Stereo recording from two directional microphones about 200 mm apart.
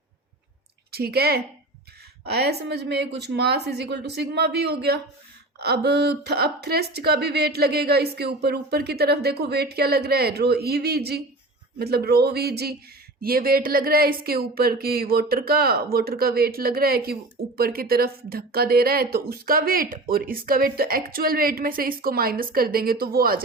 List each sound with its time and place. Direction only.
0.9 s a woman's voice: 50° right (ahead or behind)